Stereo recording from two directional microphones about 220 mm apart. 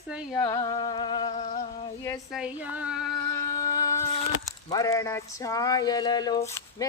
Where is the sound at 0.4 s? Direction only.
20° left (ahead or behind).